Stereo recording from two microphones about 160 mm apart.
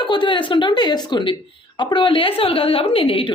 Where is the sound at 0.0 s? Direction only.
30° left (ahead or behind).